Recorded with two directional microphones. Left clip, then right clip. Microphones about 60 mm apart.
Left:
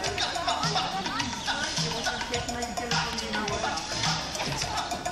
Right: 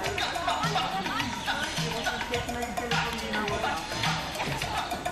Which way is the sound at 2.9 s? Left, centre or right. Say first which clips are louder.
Even; left.